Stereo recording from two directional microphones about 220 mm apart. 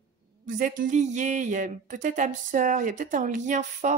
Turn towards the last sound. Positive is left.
turn(degrees=-35)  # may be behind; listen again after turning